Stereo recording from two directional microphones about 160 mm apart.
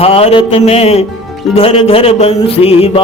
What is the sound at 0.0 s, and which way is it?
Music, 40° left (ahead or behind).